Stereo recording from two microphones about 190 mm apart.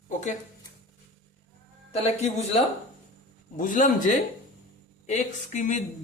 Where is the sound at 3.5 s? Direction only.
45° left (ahead or behind).